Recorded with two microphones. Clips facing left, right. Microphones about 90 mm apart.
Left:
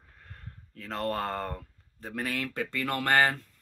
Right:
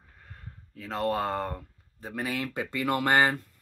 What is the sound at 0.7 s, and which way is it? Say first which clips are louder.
Speech: right 3 dB; 5° right (ahead or behind).